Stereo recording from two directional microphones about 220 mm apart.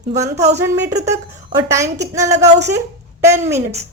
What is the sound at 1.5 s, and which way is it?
A woman's voice, 15° right (ahead or behind).